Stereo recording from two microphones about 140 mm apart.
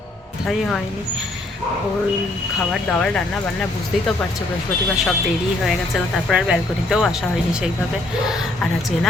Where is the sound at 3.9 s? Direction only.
Centre (ahead or behind).